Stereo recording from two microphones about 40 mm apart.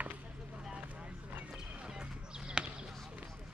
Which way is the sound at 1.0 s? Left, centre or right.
Right.